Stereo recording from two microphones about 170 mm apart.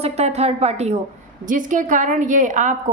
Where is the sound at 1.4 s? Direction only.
50° right (ahead or behind).